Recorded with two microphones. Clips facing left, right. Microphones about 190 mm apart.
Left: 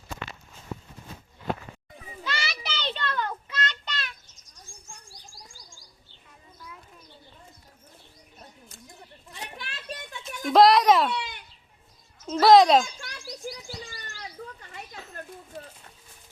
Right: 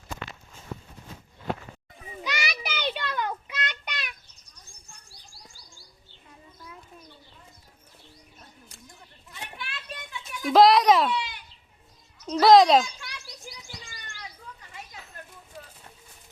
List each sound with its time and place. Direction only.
2.2 s child singing: 15° right (ahead or behind)
4.5 s bird: 45° left (ahead or behind)
9.3 s children playing: 40° left (ahead or behind)
10.4 s a sound: centre (ahead or behind)
12.3 s speech: centre (ahead or behind)
13.2 s bird: 35° left (ahead or behind)